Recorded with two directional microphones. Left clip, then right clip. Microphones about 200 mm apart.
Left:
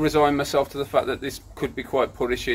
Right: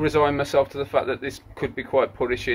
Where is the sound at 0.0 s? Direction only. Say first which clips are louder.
Left 1 dB; 15° left (ahead or behind).